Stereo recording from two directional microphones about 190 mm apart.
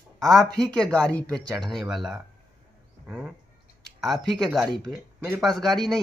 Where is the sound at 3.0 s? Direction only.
10° right (ahead or behind).